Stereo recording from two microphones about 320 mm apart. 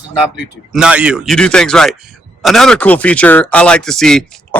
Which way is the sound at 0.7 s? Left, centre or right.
Centre.